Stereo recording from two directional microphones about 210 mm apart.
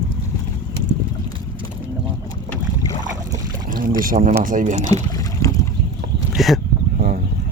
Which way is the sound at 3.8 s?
40° right (ahead or behind).